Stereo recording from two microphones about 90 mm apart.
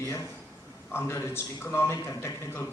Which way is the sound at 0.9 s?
30° left (ahead or behind).